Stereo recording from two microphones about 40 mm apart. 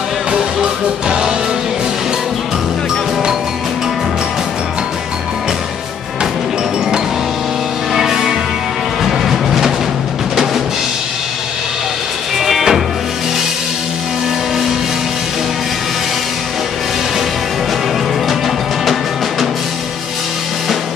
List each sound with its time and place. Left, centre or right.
0.3 s music: centre
7.9 s music: centre
10.3 s drum: centre
12.4 s music: centre